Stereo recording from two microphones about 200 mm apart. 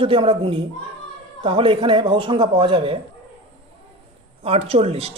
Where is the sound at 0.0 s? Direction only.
25° right (ahead or behind).